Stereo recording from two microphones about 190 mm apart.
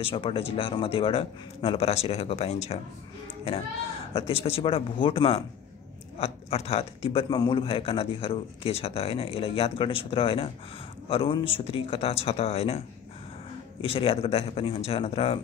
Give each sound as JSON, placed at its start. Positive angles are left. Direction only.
{"t": 0.0, "sound": "speech", "side_deg": 30}
{"t": 4.1, "sound": "speech", "side_deg": 30}